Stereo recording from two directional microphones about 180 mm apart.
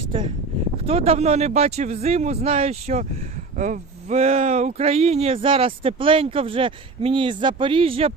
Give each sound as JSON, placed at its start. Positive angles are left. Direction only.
{"t": 0.9, "sound": "speech", "side_deg": -35}